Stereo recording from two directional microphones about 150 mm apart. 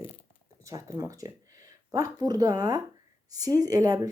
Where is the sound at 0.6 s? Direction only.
20° right (ahead or behind).